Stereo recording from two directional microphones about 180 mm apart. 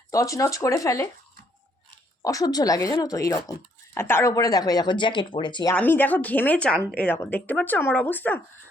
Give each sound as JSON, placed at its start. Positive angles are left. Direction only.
{"t": 0.1, "sound": "speech", "side_deg": 20}
{"t": 2.2, "sound": "speech", "side_deg": 20}
{"t": 5.7, "sound": "speech", "side_deg": 10}